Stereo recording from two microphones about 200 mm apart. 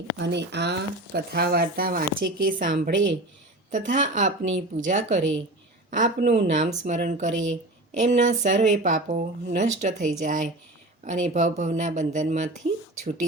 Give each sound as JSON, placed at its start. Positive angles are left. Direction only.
{"t": 0.2, "sound": "a woman's voice", "side_deg": -60}
{"t": 6.6, "sound": "a woman's voice", "side_deg": -35}